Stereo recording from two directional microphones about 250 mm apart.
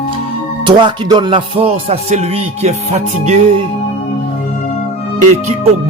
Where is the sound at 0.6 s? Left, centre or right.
Centre.